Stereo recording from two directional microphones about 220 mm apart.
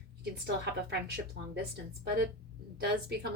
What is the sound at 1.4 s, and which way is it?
Speech, 50° right (ahead or behind).